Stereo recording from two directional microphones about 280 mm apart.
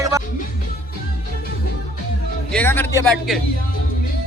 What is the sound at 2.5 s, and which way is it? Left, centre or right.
Speech, centre.